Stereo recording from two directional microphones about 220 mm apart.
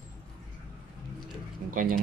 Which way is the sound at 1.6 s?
50° right (ahead or behind).